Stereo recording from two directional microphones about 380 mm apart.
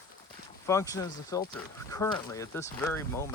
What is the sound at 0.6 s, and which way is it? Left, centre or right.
Speech, centre.